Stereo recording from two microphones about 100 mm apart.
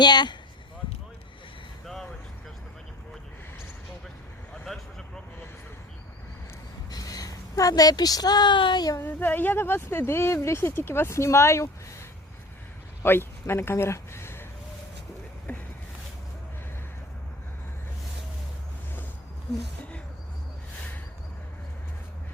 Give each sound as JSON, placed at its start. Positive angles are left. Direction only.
{"t": 0.0, "sound": "speech", "side_deg": 45}
{"t": 6.9, "sound": "a woman's voice", "side_deg": 40}
{"t": 8.9, "sound": "speech", "side_deg": 25}
{"t": 13.0, "sound": "speech", "side_deg": 25}
{"t": 15.5, "sound": "a sound", "side_deg": 15}